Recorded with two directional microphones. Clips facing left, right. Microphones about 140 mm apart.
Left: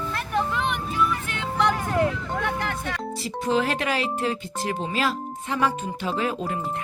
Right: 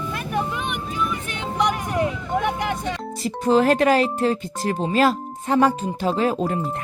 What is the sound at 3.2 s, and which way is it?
Speech, 40° right (ahead or behind).